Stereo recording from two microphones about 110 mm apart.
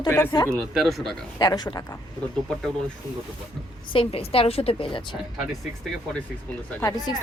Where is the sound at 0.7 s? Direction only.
Centre (ahead or behind).